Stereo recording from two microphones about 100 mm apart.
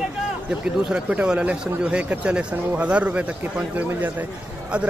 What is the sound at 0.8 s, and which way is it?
Speech, 10° right (ahead or behind).